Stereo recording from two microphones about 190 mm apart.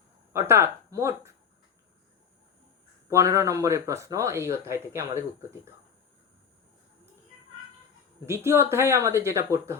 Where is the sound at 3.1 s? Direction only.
15° right (ahead or behind).